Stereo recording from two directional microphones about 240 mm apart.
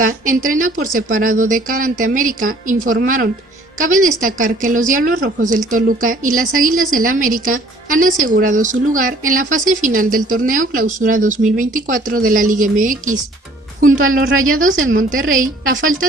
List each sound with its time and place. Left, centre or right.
0.0 s a woman's voice: right
14.2 s a woman's voice: right
14.9 s speech: right